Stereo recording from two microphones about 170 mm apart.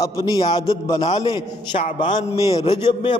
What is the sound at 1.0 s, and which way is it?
A man's voice, 35° left (ahead or behind).